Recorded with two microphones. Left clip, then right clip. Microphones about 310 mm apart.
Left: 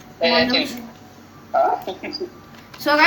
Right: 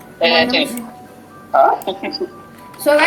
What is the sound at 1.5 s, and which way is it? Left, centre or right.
Speech, right.